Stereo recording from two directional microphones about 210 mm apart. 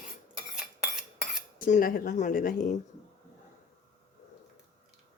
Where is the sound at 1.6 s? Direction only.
40° left (ahead or behind).